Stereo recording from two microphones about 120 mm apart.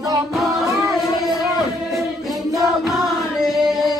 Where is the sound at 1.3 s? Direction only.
Centre (ahead or behind).